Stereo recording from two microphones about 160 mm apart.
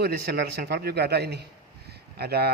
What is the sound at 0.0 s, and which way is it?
A man's voice, 85° right.